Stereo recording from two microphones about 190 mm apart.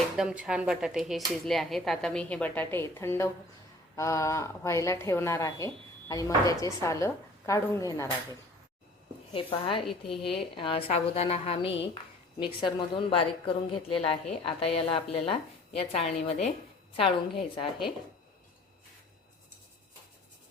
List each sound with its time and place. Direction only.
0.2 s a woman's voice: 5° right (ahead or behind); by 17.7 s 30° left (ahead or behind)